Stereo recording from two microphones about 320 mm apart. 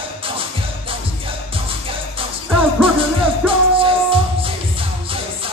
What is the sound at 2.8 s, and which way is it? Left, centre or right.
Music, centre.